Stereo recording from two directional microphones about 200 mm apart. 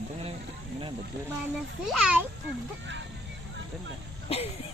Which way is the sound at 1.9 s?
5° right (ahead or behind).